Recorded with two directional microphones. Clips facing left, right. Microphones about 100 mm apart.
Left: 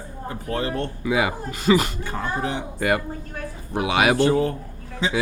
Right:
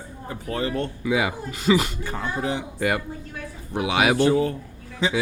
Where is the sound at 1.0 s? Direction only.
50° left (ahead or behind).